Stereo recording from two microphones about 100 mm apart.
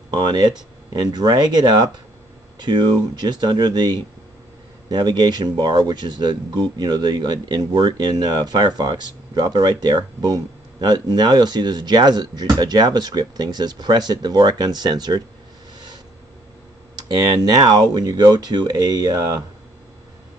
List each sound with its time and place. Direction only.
0.1 s speech: 50° right (ahead or behind)
16.9 s speech: 45° right (ahead or behind)